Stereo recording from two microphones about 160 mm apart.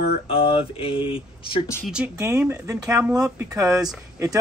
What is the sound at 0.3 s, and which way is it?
Speech, 35° left (ahead or behind).